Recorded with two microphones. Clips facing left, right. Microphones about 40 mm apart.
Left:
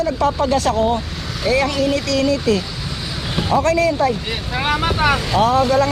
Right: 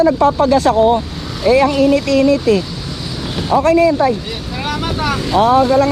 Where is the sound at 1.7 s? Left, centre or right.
Right.